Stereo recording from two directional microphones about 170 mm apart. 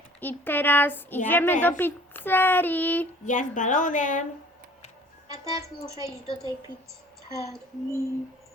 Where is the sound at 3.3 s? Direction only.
45° left (ahead or behind).